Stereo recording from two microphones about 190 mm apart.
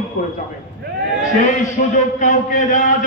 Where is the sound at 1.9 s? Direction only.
40° left (ahead or behind).